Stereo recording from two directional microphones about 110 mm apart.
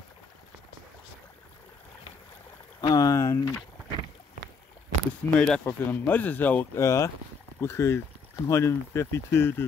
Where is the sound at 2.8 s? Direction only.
40° left (ahead or behind).